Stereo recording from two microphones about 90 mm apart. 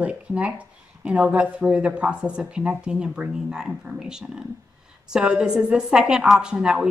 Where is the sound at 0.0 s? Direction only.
15° right (ahead or behind).